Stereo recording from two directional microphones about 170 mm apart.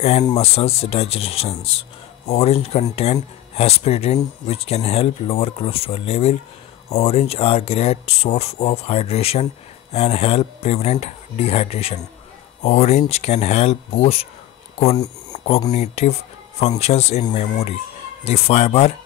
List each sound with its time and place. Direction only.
0.4 s speech: 35° left (ahead or behind)
15.3 s a sound: 35° left (ahead or behind)
15.7 s speech: 40° left (ahead or behind)